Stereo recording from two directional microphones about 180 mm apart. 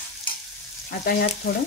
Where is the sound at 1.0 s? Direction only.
55° left (ahead or behind).